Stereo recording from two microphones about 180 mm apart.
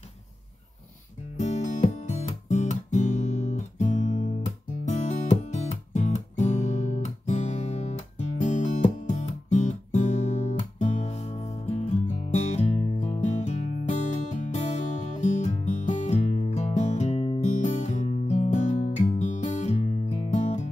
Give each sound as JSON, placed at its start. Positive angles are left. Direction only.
{"t": 1.4, "sound": "music", "side_deg": 40}